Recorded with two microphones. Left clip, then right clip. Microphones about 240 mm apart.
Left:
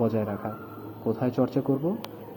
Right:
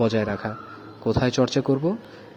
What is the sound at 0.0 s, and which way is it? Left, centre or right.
A man's voice, right.